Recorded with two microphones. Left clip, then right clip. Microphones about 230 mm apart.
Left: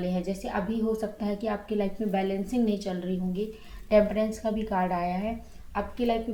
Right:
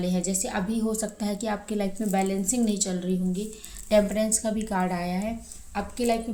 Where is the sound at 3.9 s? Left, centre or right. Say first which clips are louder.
Even; right.